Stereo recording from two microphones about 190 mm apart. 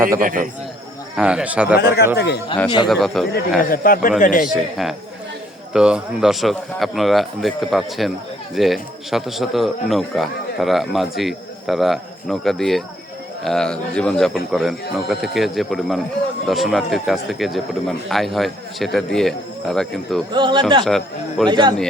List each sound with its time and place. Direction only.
0.2 s a man's voice: 45° right (ahead or behind)
1.1 s a man's voice: 5° right (ahead or behind)
1.8 s speech: 55° left (ahead or behind)
2.6 s a man's voice: 25° left (ahead or behind)
2.9 s a man's voice: centre (ahead or behind)
3.6 s speech: 50° left (ahead or behind)
4.5 s a man's voice: centre (ahead or behind)
20.3 s speech: 25° right (ahead or behind)
20.8 s a man's voice: centre (ahead or behind)
21.5 s speech: 25° right (ahead or behind)